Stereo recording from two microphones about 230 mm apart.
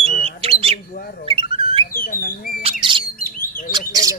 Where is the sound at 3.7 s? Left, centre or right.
Centre.